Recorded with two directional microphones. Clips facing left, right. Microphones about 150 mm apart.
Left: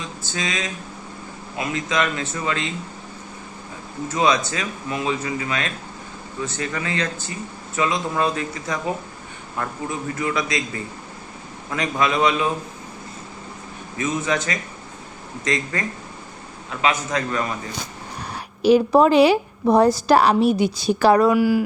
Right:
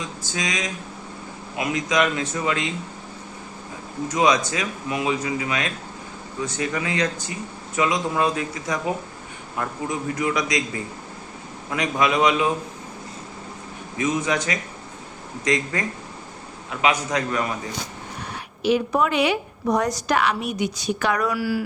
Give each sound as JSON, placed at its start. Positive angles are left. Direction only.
{"t": 0.2, "sound": "a man's voice", "side_deg": -15}
{"t": 4.1, "sound": "a man's voice", "side_deg": -15}
{"t": 11.7, "sound": "a man's voice", "side_deg": -15}
{"t": 14.0, "sound": "a man's voice", "side_deg": -15}
{"t": 18.2, "sound": "speech", "side_deg": 35}